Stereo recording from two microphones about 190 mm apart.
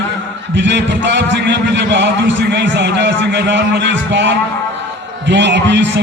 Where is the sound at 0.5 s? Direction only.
70° right (ahead or behind).